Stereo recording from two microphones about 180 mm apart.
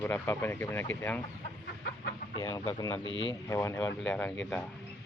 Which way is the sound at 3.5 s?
15° left (ahead or behind).